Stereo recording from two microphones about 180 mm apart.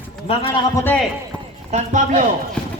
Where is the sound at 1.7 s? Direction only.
45° right (ahead or behind).